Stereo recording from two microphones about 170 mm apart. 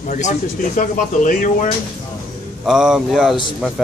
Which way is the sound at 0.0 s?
45° left (ahead or behind).